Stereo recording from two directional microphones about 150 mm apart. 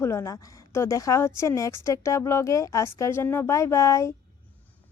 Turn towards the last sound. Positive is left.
turn(degrees=20)  # may be behind; listen again after turning